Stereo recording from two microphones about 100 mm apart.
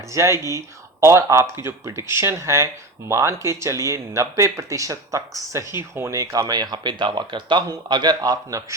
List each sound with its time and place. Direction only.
0.1 s speech: 30° right (ahead or behind)